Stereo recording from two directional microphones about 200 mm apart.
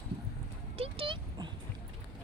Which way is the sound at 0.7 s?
30° right (ahead or behind).